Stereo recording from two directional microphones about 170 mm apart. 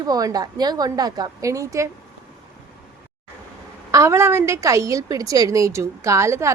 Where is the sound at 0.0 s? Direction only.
20° right (ahead or behind).